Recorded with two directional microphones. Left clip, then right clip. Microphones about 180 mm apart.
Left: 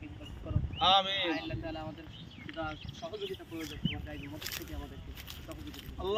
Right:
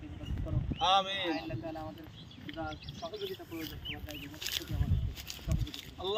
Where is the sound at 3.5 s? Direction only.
Centre (ahead or behind).